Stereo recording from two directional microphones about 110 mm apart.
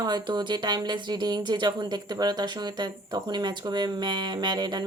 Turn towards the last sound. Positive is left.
turn(degrees=-40)  # may be behind; listen again after turning